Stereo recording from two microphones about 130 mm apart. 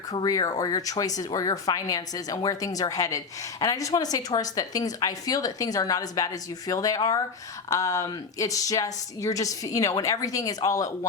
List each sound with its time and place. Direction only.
0.1 s speech: 30° left (ahead or behind)